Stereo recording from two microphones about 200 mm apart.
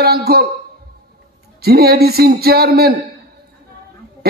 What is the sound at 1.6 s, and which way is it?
Speech, 50° right (ahead or behind).